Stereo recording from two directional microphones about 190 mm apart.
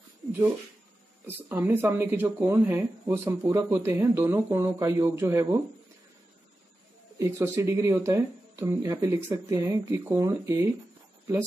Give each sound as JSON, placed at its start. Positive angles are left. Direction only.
{"t": 1.2, "sound": "speech", "side_deg": -10}
{"t": 7.2, "sound": "speech", "side_deg": -15}